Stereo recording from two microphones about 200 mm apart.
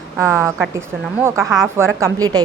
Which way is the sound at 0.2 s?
10° right (ahead or behind).